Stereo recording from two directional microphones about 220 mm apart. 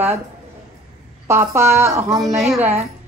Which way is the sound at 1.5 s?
10° right (ahead or behind).